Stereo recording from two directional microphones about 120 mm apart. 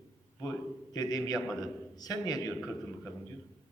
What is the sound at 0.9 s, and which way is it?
A man's voice, 30° left (ahead or behind).